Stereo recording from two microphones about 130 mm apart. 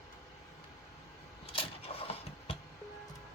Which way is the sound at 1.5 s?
50° left (ahead or behind).